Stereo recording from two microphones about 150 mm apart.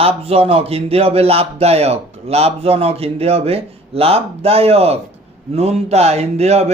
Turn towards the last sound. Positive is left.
turn(degrees=-45)  # may be behind; listen again after turning